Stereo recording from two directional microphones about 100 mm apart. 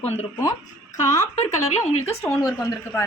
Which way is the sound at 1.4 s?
90° left.